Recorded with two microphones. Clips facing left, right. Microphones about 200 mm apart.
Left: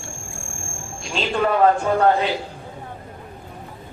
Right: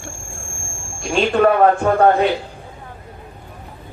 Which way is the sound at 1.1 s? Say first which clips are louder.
Right 6 dB; 55° right (ahead or behind).